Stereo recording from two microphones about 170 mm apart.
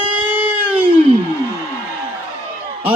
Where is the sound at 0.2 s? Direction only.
10° right (ahead or behind).